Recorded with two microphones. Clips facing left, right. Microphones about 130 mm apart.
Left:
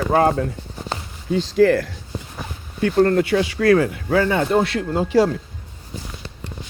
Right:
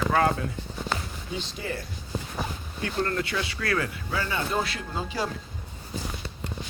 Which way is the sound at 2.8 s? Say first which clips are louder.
Left 12 dB; 50° left (ahead or behind).